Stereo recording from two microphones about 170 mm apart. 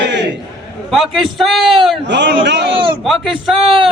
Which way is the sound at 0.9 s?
Centre (ahead or behind).